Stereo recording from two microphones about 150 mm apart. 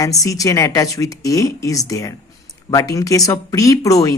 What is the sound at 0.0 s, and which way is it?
Speech, 20° left (ahead or behind).